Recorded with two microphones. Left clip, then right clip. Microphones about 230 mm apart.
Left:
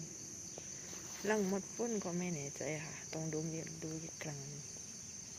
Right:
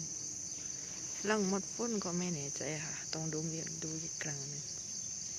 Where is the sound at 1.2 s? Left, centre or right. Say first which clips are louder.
Right 2 dB; centre.